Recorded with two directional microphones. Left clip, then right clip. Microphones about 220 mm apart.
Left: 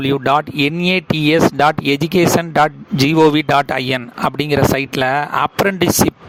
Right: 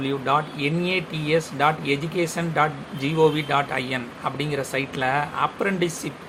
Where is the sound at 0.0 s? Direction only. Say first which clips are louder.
Left 8 dB; 50° left (ahead or behind).